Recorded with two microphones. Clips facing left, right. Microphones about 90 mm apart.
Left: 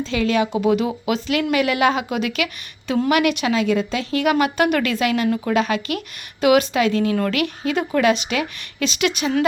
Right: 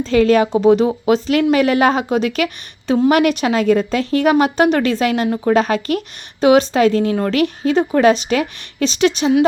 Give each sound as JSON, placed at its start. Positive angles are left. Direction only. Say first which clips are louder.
{"t": 0.0, "sound": "speech", "louder": "right 7 dB", "side_deg": -40}